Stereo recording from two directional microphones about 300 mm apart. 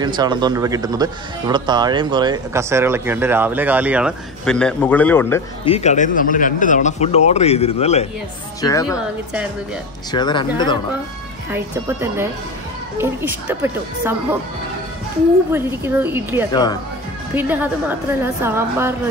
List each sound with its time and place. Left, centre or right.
0.0 s speech: centre
5.7 s a woman's voice: left
10.1 s speech: centre
11.5 s speech: centre
15.5 s speech: centre